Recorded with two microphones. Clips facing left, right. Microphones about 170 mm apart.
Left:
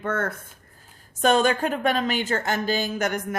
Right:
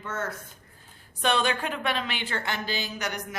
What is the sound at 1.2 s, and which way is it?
Speech, 45° left (ahead or behind).